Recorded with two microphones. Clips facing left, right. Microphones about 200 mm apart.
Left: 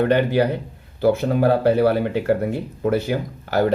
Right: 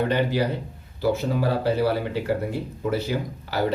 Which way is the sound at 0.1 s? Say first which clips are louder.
Left 5 dB; 55° left (ahead or behind).